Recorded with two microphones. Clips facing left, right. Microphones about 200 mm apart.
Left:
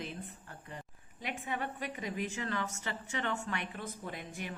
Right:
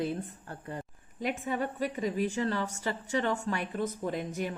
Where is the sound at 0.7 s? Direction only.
45° right (ahead or behind).